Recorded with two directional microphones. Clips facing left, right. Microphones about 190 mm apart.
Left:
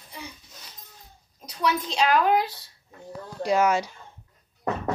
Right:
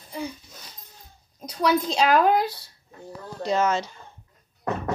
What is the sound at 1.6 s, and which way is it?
Speech, 40° right (ahead or behind).